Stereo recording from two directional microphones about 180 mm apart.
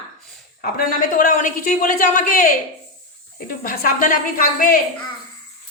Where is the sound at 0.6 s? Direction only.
50° left (ahead or behind).